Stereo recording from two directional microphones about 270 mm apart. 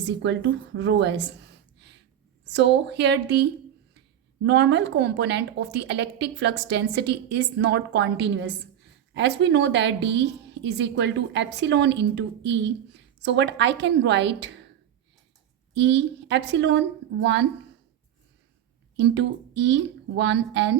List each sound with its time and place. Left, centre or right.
0.0 s a woman's voice: right
2.4 s a woman's voice: right
15.7 s a woman's voice: right
18.9 s a woman's voice: right